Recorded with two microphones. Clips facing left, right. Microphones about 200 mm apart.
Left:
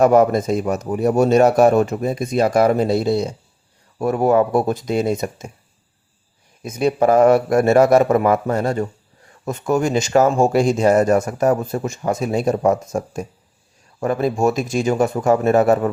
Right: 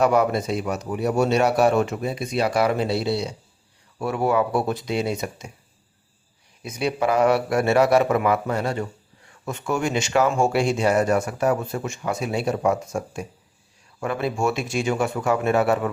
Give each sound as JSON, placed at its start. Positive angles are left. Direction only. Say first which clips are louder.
{"t": 0.0, "sound": "speech", "louder": "left 6 dB", "side_deg": 45}
{"t": 6.6, "sound": "speech", "louder": "left 6 dB", "side_deg": 45}